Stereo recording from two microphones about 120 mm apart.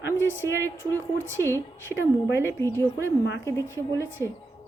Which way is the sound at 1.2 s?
20° right (ahead or behind).